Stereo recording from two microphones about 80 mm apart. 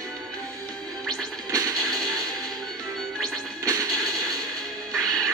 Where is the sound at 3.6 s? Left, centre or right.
Right.